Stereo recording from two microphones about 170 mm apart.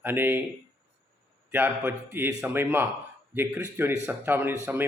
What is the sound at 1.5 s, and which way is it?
Speech, 10° right (ahead or behind).